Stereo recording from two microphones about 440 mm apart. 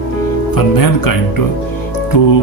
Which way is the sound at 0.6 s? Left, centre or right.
Left.